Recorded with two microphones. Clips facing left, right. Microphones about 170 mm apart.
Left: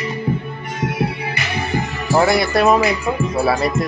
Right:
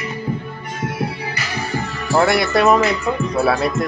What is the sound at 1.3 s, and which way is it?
Music, 20° left (ahead or behind).